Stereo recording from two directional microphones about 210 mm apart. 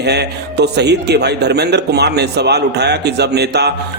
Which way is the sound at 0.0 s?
50° right (ahead or behind).